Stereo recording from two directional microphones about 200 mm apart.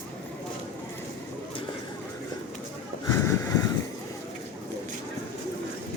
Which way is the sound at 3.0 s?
15° left (ahead or behind).